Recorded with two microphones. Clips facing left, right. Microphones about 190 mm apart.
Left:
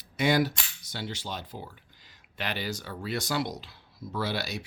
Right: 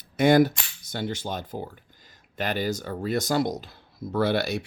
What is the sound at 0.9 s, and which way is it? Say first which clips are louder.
Speech: right 6 dB; 50° right (ahead or behind).